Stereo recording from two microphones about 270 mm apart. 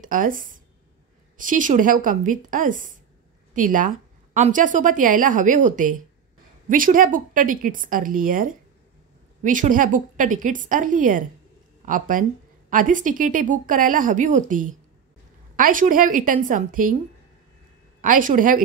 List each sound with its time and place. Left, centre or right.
0.0 s a woman's voice: right
18.0 s a woman's voice: right